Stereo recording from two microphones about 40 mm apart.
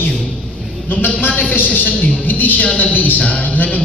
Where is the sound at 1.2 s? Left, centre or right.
Left.